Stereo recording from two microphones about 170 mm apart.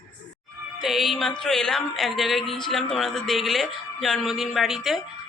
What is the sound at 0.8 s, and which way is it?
Speech, centre (ahead or behind).